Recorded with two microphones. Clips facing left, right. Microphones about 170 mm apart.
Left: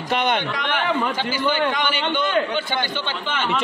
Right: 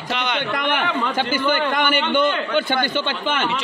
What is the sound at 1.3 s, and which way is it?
A man's voice, 50° right (ahead or behind).